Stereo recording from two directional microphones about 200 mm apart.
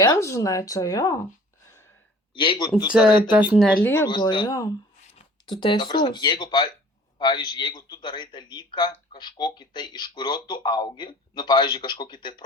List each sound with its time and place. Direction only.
0.0 s speech: 15° left (ahead or behind)
2.3 s a man's voice: 25° left (ahead or behind)
2.8 s speech: 5° right (ahead or behind)
4.0 s a man's voice: 20° left (ahead or behind)